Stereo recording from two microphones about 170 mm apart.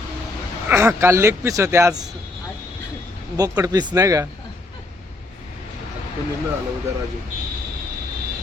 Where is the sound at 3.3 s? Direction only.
20° right (ahead or behind).